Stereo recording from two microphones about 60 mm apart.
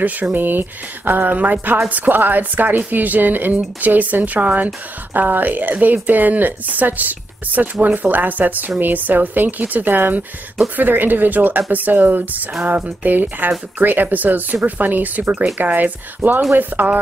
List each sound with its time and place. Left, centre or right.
0.0 s speech: right
16.2 s speech: right
16.5 s speech: right